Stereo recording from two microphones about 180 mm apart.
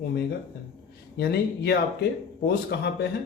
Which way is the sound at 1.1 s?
65° left (ahead or behind).